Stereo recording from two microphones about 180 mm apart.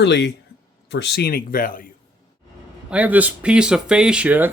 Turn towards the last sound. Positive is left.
turn(degrees=-10)  # may be behind; listen again after turning